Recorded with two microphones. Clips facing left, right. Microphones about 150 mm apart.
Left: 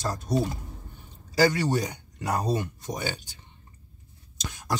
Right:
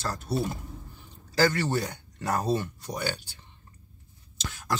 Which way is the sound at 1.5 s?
15° left (ahead or behind).